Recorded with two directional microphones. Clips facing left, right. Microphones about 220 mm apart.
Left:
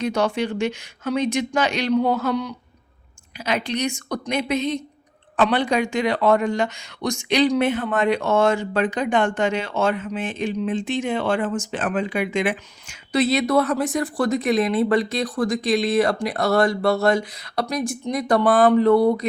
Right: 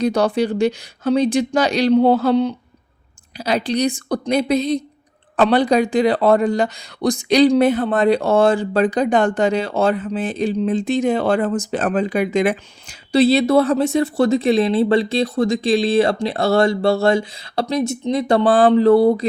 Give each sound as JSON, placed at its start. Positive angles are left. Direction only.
{"t": 0.0, "sound": "speech", "side_deg": -35}